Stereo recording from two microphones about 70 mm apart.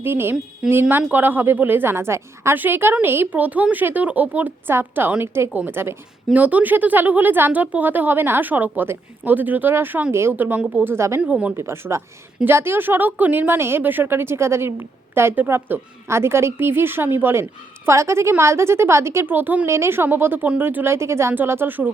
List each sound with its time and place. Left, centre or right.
0.0 s a woman's voice: right
6.3 s speech: right
10.8 s a woman's voice: right
11.2 s speech: centre
11.5 s a woman's voice: right
19.3 s speech: right
19.6 s a woman's voice: right